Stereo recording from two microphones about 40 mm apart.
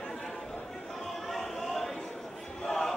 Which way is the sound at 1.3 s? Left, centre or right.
Centre.